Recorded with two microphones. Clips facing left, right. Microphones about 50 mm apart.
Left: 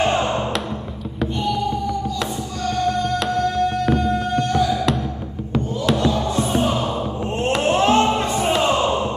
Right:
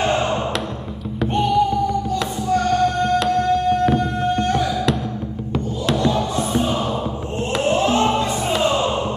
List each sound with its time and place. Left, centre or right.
2.5 s music: right
7.6 s music: left